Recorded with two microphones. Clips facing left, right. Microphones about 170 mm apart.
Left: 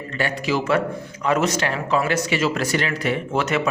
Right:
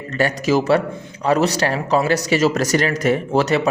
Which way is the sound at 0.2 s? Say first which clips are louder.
Right 6 dB; 40° right (ahead or behind).